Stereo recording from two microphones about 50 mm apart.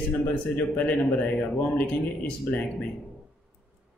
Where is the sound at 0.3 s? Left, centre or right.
Left.